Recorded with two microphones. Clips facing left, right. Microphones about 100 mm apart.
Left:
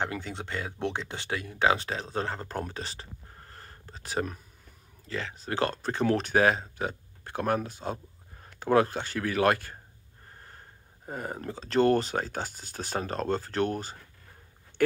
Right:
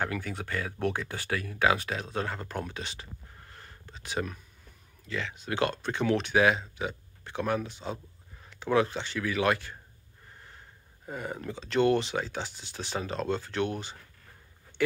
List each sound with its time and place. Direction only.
0.0 s speech: 25° left (ahead or behind); by 9.8 s 45° left (ahead or behind)
11.1 s speech: 40° left (ahead or behind)